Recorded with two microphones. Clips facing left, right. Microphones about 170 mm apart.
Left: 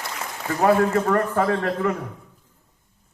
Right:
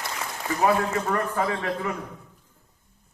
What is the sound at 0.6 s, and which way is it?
A man's voice, 55° left (ahead or behind).